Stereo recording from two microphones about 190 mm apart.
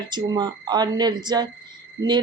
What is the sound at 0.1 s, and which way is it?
A woman's voice, 25° right (ahead or behind).